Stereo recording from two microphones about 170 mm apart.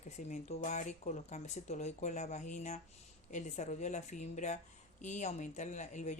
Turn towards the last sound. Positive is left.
turn(degrees=45)  # may be behind; listen again after turning